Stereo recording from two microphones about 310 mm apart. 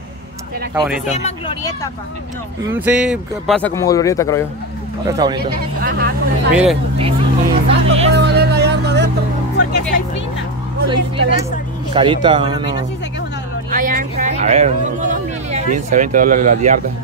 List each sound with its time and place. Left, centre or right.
1.0 s speech: left
2.6 s speech: centre
5.0 s speech: centre
5.4 s speech: right
6.5 s speech: centre
7.0 s vehicle: centre
8.1 s music: right
10.9 s speech: centre
13.7 s a sound: right